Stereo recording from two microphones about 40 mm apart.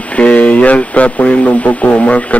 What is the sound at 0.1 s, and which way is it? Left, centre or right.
Speech, left.